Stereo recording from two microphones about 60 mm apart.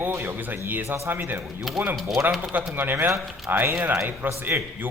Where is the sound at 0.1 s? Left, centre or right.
Right.